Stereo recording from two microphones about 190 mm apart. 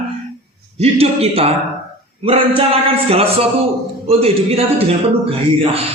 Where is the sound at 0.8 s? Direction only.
30° right (ahead or behind).